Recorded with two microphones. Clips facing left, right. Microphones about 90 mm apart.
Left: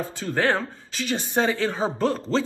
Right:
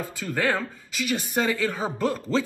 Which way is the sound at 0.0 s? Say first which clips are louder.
Left 2 dB; 30° left (ahead or behind).